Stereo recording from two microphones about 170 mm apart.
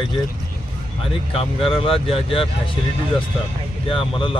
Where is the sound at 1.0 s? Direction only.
35° left (ahead or behind).